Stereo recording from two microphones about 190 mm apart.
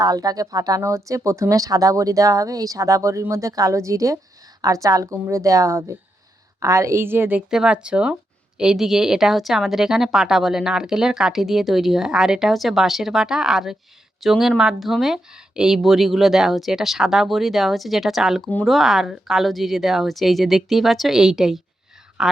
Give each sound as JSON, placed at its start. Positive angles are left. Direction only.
{"t": 0.0, "sound": "speech", "side_deg": -20}